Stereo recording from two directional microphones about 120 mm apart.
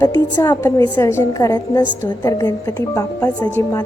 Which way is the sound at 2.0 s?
20° left (ahead or behind).